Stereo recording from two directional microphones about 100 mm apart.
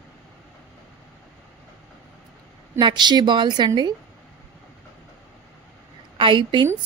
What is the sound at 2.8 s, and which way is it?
A woman's voice, 50° right (ahead or behind).